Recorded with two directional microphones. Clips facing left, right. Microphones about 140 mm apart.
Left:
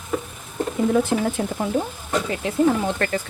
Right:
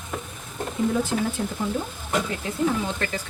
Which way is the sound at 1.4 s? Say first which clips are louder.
Left 3 dB; 75° left (ahead or behind).